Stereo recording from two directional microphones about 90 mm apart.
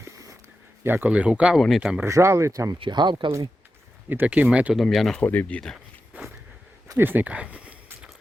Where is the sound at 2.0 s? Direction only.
30° right (ahead or behind).